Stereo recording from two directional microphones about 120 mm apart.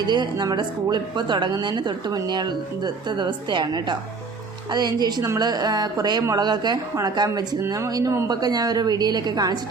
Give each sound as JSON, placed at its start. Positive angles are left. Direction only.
{"t": 0.1, "sound": "a woman's voice", "side_deg": -35}